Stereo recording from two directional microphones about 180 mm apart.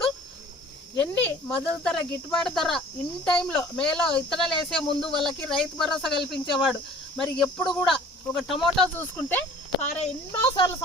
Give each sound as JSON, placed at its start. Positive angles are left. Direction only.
{"t": 1.0, "sound": "speech", "side_deg": 10}
{"t": 9.0, "sound": "speech", "side_deg": 10}
{"t": 10.4, "sound": "speech", "side_deg": 25}